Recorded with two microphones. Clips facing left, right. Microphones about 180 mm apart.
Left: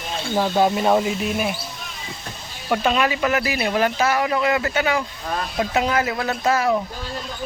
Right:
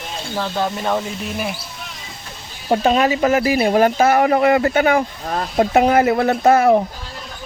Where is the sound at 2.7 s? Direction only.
40° right (ahead or behind).